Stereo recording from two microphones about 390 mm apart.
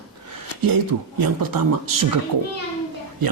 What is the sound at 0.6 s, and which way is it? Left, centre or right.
Speech, right.